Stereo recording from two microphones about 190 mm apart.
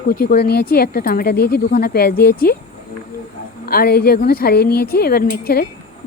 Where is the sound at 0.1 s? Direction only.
50° left (ahead or behind).